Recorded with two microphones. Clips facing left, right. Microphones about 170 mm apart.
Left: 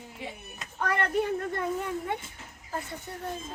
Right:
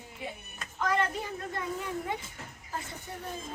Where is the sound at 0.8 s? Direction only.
60° left (ahead or behind).